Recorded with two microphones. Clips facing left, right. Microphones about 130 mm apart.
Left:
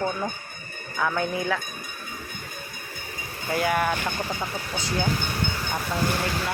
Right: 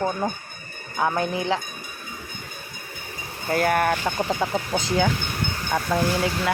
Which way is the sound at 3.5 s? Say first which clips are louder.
Right 3 dB; 50° right (ahead or behind).